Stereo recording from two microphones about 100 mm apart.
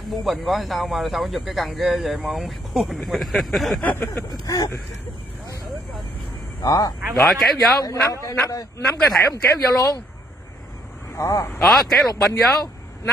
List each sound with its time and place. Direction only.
0.1 s speech: centre (ahead or behind)
3.8 s speech: 20° left (ahead or behind)
6.6 s speech: 35° left (ahead or behind)
7.2 s speech: centre (ahead or behind)
7.8 s speech: 35° left (ahead or behind)
11.1 s speech: 30° left (ahead or behind)
11.6 s speech: centre (ahead or behind)
12.1 s speech: 35° left (ahead or behind)